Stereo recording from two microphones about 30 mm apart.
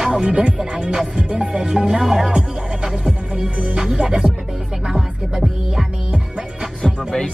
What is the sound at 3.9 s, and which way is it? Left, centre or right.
Music, centre.